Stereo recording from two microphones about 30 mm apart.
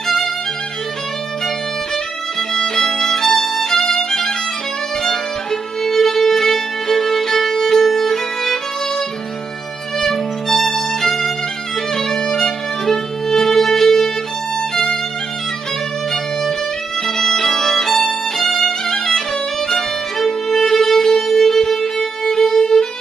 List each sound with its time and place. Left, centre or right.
2.5 s violin: centre
3.8 s violin: centre
5.0 s music: centre
9.9 s violin: centre
11.9 s music: centre
17.0 s violin: centre
20.4 s music: centre